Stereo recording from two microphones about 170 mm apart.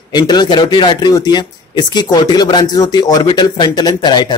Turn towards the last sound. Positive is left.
turn(degrees=25)  # may be behind; listen again after turning